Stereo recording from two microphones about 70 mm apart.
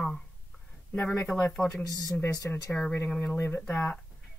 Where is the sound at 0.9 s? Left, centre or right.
Left.